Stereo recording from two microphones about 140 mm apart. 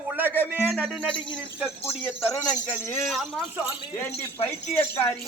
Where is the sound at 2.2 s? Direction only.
10° left (ahead or behind).